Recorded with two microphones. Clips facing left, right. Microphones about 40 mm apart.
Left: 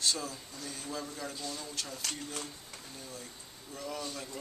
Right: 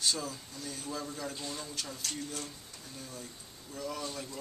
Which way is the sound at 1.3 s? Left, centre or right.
Right.